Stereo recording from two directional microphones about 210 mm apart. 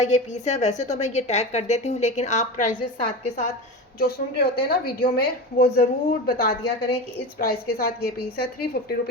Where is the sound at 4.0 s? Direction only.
45° left (ahead or behind).